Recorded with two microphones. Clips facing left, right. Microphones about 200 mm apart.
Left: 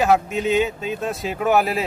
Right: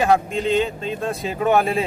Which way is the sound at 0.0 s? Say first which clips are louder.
Even; 5° left (ahead or behind).